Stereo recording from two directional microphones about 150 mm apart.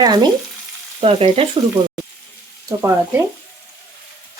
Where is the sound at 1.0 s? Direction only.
40° right (ahead or behind).